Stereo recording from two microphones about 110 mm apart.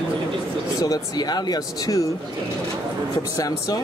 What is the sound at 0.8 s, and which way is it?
Speech, 35° left (ahead or behind).